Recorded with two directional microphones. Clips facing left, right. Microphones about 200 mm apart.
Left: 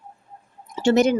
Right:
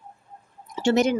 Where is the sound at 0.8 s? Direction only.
45° left (ahead or behind).